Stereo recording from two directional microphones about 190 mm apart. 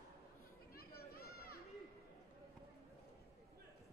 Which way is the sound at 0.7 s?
55° left (ahead or behind).